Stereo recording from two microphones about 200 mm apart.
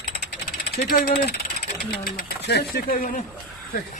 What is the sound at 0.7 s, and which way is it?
A man's voice, 50° left (ahead or behind).